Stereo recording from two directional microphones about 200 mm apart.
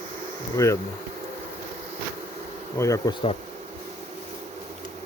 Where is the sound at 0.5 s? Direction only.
15° left (ahead or behind).